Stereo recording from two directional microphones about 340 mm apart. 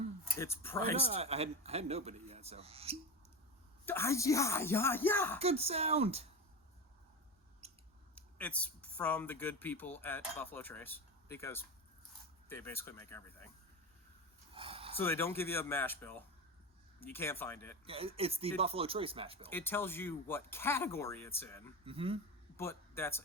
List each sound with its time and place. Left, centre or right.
0.3 s speech: centre
0.9 s speech: centre
3.8 s speech: centre
5.4 s speech: centre
7.6 s mouse: centre
8.1 s speech: centre
14.5 s a sound: centre
14.9 s speech: centre
17.8 s speech: centre
19.5 s speech: centre
21.8 s speech: centre
22.5 s speech: centre